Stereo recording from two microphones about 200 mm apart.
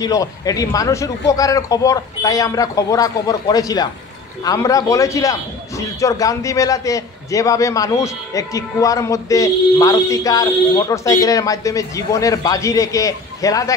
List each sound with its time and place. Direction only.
0.0 s a man's voice: 15° left (ahead or behind)